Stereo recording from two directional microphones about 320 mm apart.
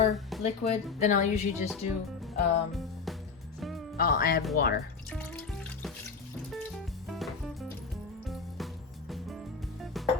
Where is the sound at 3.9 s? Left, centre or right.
Left.